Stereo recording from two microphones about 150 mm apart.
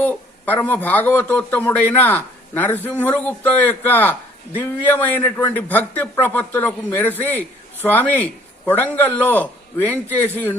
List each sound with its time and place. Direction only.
0.0 s a man's voice: 10° left (ahead or behind)